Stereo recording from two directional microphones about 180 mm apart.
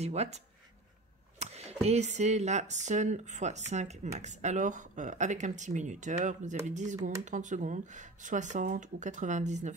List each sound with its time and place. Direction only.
0.0 s speech: 40° right (ahead or behind)
1.4 s speech: 35° right (ahead or behind)